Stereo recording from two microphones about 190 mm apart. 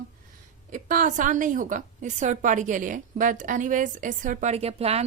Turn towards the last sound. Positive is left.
turn(degrees=-35)  # may be behind; listen again after turning